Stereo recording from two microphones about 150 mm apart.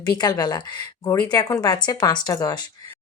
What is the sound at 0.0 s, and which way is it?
A woman's voice, 25° left (ahead or behind).